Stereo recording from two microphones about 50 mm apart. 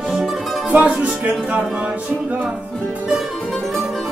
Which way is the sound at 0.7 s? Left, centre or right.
Right.